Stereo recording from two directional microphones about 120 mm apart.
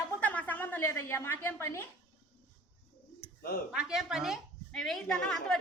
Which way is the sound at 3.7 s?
5° right (ahead or behind).